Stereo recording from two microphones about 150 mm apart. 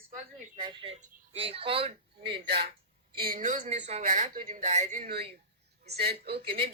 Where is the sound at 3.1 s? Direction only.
80° right.